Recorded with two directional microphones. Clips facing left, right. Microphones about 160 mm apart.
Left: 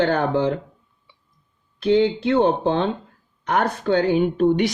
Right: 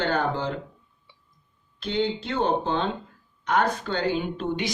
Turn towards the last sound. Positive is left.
turn(degrees=60)  # may be behind; listen again after turning